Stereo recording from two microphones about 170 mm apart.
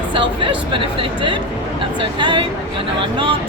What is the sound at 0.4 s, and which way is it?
Speech, 30° right (ahead or behind).